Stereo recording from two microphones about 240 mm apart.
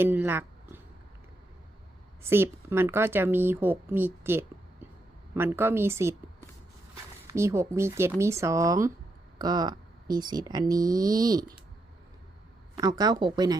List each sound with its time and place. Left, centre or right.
0.0 s a sound: centre
2.3 s speech: centre
7.3 s speech: centre
12.7 s speech: centre